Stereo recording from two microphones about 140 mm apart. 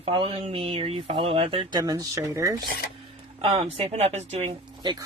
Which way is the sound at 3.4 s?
45° right (ahead or behind).